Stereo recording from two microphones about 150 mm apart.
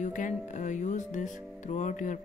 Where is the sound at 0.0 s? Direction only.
55° left (ahead or behind).